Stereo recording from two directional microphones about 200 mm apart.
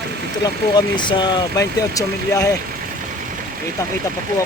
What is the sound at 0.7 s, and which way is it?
Speech, 25° left (ahead or behind).